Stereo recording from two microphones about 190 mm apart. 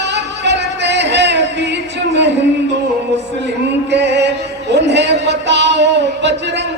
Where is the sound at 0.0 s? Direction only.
65° right (ahead or behind).